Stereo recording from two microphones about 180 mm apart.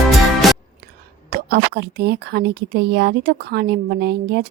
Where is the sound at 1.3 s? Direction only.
65° right (ahead or behind).